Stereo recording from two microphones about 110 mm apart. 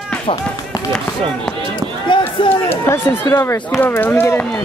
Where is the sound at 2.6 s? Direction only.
25° left (ahead or behind).